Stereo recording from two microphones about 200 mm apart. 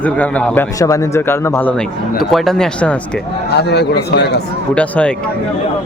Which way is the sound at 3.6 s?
55° left (ahead or behind).